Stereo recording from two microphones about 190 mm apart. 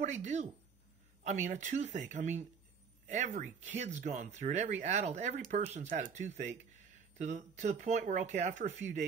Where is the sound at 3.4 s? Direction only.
40° right (ahead or behind).